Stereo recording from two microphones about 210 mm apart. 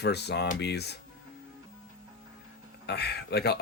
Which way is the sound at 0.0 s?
50° left (ahead or behind).